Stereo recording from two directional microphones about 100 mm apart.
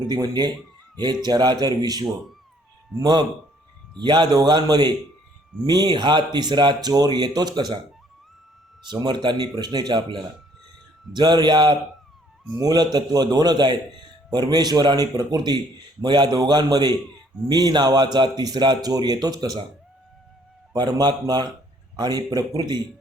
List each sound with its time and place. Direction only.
0.1 s a man's voice: 45° right (ahead or behind)
8.9 s a man's voice: 45° right (ahead or behind)
20.7 s a man's voice: 45° right (ahead or behind)